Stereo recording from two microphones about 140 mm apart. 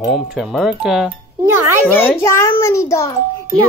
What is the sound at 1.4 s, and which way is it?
Speech, 15° right (ahead or behind).